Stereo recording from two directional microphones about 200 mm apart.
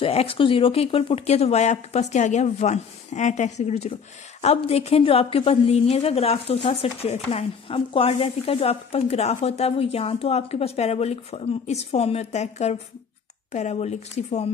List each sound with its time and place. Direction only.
0.0 s a woman's voice: 30° left (ahead or behind)